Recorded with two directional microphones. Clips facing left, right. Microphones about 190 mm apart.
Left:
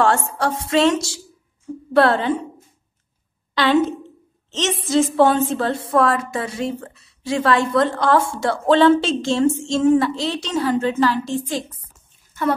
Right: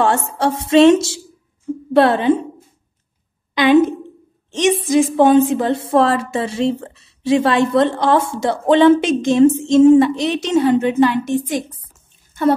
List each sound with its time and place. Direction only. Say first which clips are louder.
0.4 s a woman's voice: right 9 dB; 25° right (ahead or behind)
3.5 s a woman's voice: right 5 dB; 15° right (ahead or behind)